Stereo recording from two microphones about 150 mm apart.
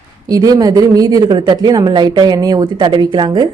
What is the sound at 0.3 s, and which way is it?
Speech, 25° right (ahead or behind).